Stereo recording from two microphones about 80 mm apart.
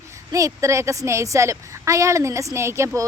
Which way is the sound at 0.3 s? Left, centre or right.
Right.